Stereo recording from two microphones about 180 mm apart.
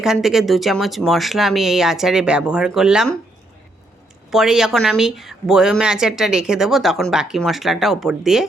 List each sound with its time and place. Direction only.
0.0 s a woman's voice: centre (ahead or behind)
4.3 s a woman's voice: centre (ahead or behind)